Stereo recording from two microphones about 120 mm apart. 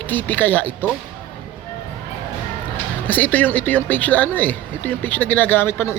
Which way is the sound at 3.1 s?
15° left (ahead or behind).